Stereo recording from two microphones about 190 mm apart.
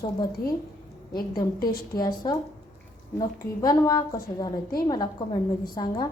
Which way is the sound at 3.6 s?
20° left (ahead or behind).